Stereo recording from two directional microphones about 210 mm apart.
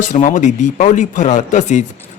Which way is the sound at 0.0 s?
35° left (ahead or behind).